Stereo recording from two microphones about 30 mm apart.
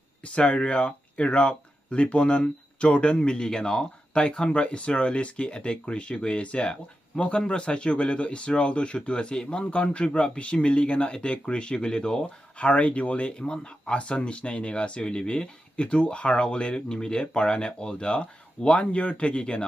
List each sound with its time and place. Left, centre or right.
0.2 s speech: left
0.6 s speech: left
12.5 s speech: left
13.4 s speech: left
15.7 s speech: left
18.8 s speech: left